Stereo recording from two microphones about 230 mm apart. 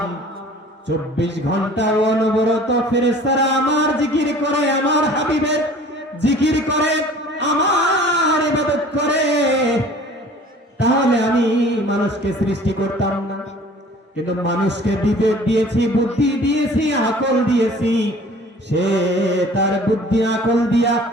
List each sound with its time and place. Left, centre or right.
0.9 s music: right
10.8 s a sound: right
14.3 s music: right